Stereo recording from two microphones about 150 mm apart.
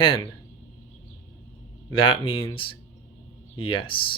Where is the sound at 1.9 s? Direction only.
35° left (ahead or behind).